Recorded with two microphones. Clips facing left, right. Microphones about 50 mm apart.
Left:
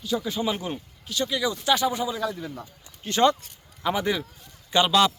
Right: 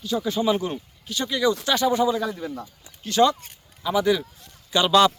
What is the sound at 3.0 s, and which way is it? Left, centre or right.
Speech, left.